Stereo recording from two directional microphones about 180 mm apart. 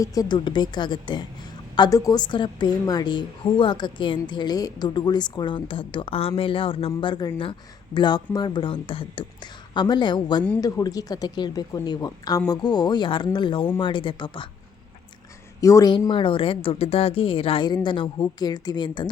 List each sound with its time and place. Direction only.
0.0 s a woman's voice: 20° left (ahead or behind)
15.6 s a woman's voice: 20° left (ahead or behind)